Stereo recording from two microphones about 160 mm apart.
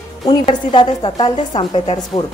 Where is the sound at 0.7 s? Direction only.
30° left (ahead or behind).